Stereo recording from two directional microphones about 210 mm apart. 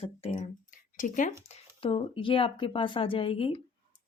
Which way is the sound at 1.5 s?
25° left (ahead or behind).